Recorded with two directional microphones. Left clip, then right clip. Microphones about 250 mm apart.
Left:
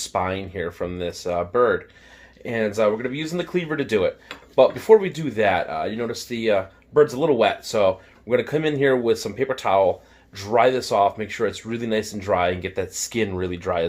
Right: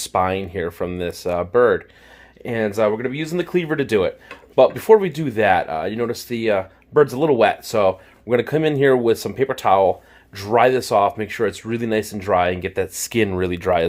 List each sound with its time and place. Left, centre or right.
0.0 s speech: right